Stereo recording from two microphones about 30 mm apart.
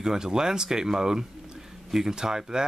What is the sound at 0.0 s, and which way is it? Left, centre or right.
Speech, right.